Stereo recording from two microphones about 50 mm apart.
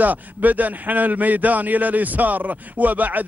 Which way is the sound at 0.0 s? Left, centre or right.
Right.